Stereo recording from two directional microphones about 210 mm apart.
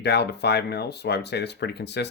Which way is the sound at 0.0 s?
50° left (ahead or behind).